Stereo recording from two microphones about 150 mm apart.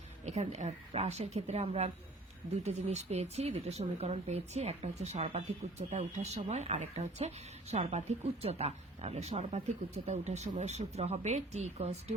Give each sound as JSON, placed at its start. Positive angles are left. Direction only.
{"t": 0.3, "sound": "speech", "side_deg": -50}